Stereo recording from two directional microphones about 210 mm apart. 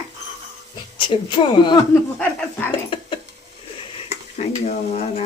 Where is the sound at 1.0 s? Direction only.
25° left (ahead or behind).